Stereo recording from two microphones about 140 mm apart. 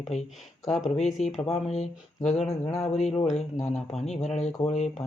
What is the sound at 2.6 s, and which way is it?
Speech, 20° left (ahead or behind).